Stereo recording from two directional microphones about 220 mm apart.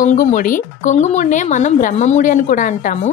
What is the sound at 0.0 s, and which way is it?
Speech, 35° left (ahead or behind).